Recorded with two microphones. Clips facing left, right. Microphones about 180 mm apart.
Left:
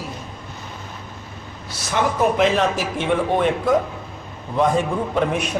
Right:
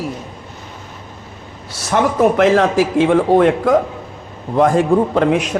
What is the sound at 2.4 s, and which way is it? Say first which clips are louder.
Speech: right 6 dB; 80° right.